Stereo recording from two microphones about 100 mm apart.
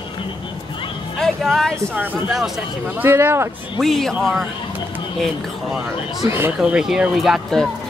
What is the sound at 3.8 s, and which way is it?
Speech, 5° left (ahead or behind).